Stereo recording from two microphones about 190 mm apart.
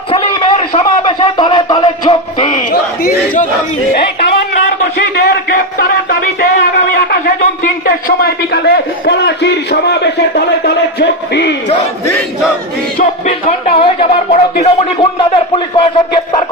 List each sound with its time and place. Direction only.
0.1 s a sound: 30° left (ahead or behind)
2.7 s speech: 50° left (ahead or behind)
4.9 s music: 55° left (ahead or behind)
13.0 s speech: 40° left (ahead or behind)